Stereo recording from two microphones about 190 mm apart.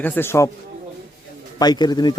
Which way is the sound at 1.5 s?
20° left (ahead or behind).